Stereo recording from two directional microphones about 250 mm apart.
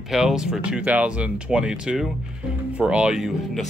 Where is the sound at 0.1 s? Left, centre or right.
Centre.